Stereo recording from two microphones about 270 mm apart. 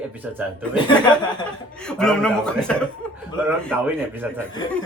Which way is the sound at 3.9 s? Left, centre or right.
Centre.